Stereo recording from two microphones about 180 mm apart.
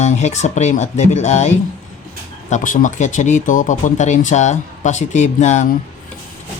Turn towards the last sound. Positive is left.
turn(degrees=40)  # may be behind; listen again after turning